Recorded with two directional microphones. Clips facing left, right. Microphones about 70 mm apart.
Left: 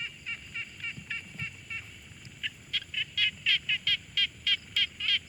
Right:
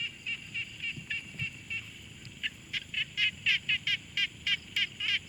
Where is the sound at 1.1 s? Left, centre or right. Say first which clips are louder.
Even; left.